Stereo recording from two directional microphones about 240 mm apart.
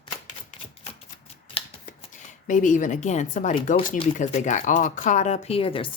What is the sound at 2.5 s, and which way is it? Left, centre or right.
Speech, left.